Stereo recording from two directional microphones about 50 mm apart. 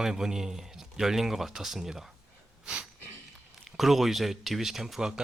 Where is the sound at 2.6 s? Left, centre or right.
Right.